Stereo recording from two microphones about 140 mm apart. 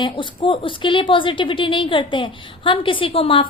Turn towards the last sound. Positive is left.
turn(degrees=40)  # may be behind; listen again after turning